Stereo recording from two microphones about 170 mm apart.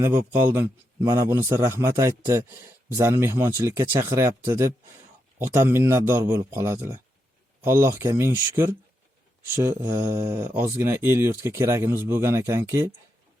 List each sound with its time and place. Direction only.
0.0 s speech: 15° right (ahead or behind)